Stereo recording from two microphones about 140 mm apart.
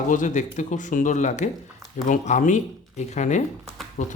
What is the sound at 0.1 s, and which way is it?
Speech, 65° left (ahead or behind).